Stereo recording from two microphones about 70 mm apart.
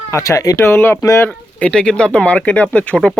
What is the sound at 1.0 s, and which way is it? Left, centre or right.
Speech, left.